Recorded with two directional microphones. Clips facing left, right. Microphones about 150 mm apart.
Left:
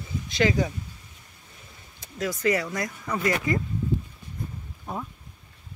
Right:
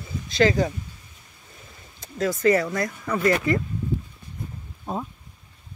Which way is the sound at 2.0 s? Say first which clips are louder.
Right 5 dB; 15° left (ahead or behind).